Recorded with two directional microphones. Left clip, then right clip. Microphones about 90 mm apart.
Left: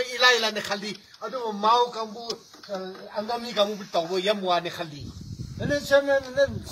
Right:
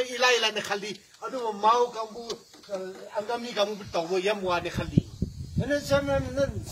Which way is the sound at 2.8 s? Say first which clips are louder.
Left 1 dB; 5° right (ahead or behind).